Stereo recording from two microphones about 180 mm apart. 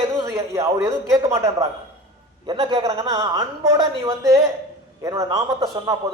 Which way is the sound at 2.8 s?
20° right (ahead or behind).